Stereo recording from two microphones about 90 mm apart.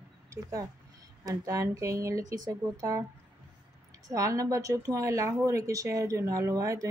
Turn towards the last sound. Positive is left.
turn(degrees=-35)  # may be behind; listen again after turning